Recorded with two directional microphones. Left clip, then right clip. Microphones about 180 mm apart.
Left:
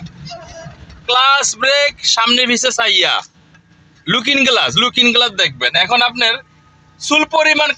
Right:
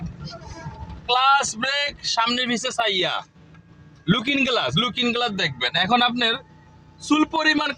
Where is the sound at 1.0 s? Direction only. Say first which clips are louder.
Left 6 dB; 20° left (ahead or behind).